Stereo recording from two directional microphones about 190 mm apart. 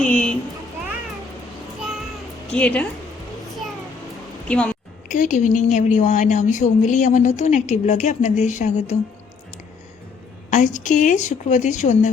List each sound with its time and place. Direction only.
0.0 s a child's voice: 5° left (ahead or behind)
2.5 s a woman's voice: 5° left (ahead or behind)
4.4 s speech: 5° left (ahead or behind)
5.0 s a woman's voice: 40° left (ahead or behind)
10.5 s a woman's voice: 40° left (ahead or behind)